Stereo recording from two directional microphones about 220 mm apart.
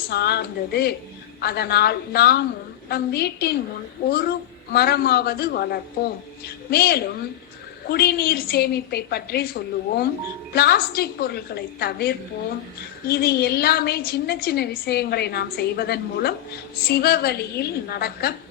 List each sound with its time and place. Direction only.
0.1 s a woman's voice: 45° left (ahead or behind)